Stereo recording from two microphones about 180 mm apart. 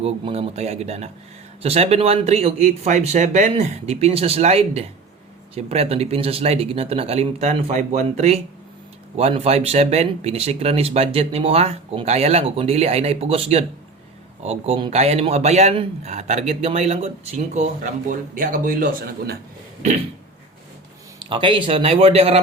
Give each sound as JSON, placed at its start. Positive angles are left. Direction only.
{"t": 0.0, "sound": "speech", "side_deg": -35}
{"t": 21.2, "sound": "speech", "side_deg": -25}